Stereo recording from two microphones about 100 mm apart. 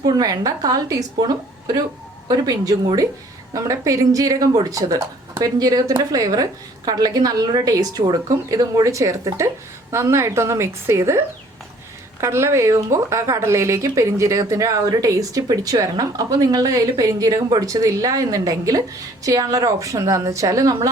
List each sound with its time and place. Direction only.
0.0 s a woman's voice: 35° right (ahead or behind)
12.2 s speech: 30° right (ahead or behind)